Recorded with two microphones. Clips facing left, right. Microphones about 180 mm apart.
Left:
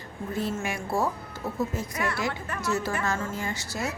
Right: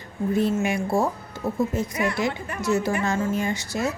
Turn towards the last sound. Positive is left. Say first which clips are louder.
# right 6 dB
turn(degrees=-20)  # may be behind; listen again after turning